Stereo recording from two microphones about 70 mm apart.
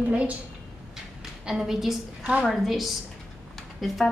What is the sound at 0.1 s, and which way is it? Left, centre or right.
Speech, centre.